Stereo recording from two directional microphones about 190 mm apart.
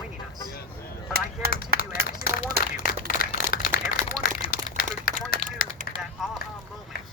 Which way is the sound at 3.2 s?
50° left (ahead or behind).